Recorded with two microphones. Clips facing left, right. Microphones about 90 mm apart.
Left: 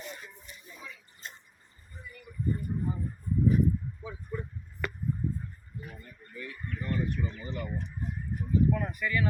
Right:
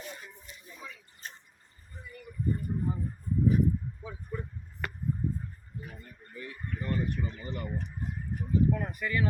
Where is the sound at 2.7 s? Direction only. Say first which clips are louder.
Even; 20° right (ahead or behind).